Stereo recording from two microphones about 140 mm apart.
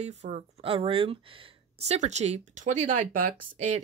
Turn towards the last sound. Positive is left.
turn(degrees=-75)  # may be behind; listen again after turning